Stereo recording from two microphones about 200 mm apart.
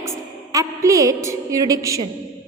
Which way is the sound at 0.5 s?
15° right (ahead or behind).